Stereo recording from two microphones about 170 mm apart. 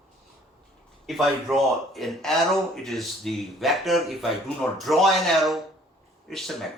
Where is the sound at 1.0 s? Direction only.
Centre (ahead or behind).